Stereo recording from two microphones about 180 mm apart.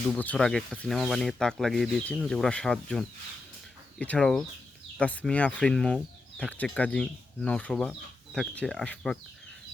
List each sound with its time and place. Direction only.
0.1 s speech: 10° left (ahead or behind)